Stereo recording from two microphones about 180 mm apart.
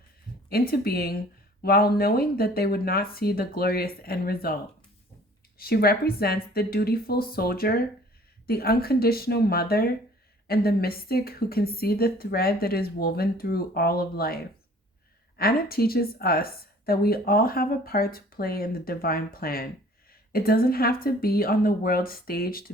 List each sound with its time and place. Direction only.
0.7 s a woman's voice: 55° left (ahead or behind)
5.5 s a woman's voice: 60° left (ahead or behind)
15.4 s a woman's voice: 60° left (ahead or behind)